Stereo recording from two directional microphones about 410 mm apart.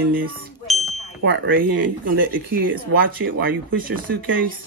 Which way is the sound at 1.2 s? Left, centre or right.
Right.